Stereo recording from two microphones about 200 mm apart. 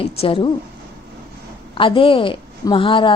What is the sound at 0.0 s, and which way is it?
Speech, 30° left (ahead or behind).